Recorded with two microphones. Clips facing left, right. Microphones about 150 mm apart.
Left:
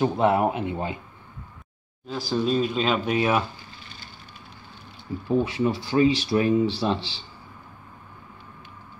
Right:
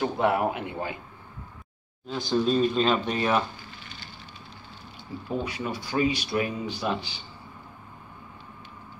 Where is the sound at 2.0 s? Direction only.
5° left (ahead or behind).